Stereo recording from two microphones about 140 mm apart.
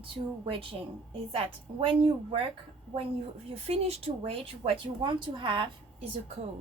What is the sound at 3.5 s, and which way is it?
Speech, 45° right (ahead or behind).